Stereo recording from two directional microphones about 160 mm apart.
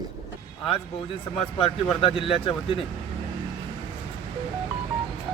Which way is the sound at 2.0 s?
35° left (ahead or behind).